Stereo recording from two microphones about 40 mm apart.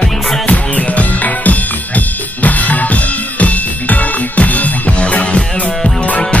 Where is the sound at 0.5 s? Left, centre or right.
Left.